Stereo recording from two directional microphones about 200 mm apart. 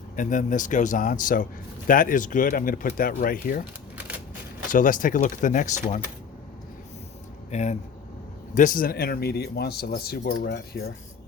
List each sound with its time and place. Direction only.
0.2 s speech: 40° left (ahead or behind)
4.7 s speech: 40° left (ahead or behind)
7.5 s speech: 35° left (ahead or behind); by 10.8 s 50° left (ahead or behind)